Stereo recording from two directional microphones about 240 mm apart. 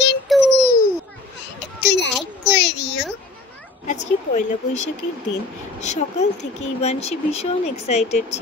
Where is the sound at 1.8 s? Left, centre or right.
Left.